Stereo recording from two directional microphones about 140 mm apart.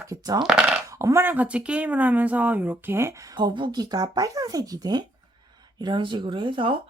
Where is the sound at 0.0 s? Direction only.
25° right (ahead or behind).